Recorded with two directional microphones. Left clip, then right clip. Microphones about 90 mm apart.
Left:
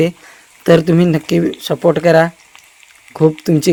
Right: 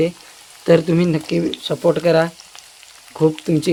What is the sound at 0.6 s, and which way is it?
Speech, 80° left.